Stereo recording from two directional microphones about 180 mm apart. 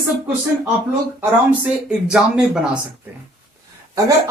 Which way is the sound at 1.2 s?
5° right (ahead or behind).